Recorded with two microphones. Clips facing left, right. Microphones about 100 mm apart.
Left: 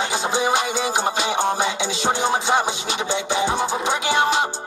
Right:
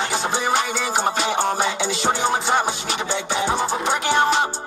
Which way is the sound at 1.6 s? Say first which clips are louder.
Right 1 dB; 15° left (ahead or behind).